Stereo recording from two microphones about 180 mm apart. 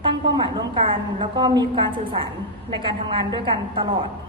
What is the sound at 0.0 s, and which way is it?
A woman's voice, 25° right (ahead or behind).